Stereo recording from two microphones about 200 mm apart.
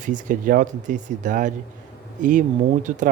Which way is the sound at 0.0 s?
40° right (ahead or behind).